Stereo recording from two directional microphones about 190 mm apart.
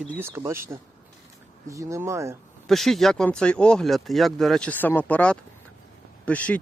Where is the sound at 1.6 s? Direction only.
15° right (ahead or behind).